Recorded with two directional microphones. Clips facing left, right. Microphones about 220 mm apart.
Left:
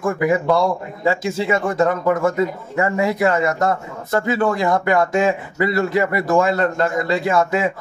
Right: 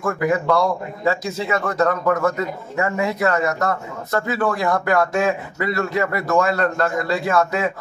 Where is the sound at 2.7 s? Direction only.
20° left (ahead or behind).